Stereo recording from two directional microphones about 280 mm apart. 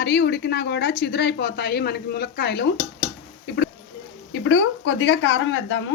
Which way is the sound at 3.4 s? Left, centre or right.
Left.